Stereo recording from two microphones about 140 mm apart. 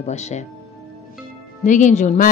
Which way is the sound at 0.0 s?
55° left (ahead or behind).